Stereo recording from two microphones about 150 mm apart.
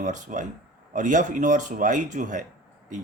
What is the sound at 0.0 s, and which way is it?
Speech, 55° right (ahead or behind).